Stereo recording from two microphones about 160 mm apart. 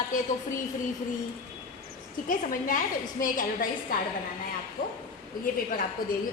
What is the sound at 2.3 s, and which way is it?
A woman's voice, 55° left (ahead or behind).